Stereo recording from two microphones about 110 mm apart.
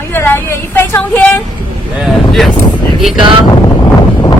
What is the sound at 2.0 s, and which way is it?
Vehicle, centre (ahead or behind).